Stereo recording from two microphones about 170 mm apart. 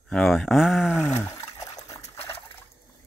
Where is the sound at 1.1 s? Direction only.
15° left (ahead or behind).